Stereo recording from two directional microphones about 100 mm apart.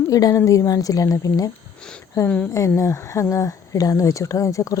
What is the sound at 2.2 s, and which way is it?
Speech, 10° left (ahead or behind).